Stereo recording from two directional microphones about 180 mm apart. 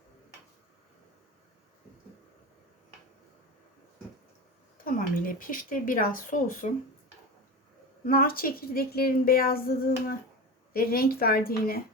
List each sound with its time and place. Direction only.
4.8 s speech: 50° left (ahead or behind)
8.0 s a woman's voice: 55° left (ahead or behind)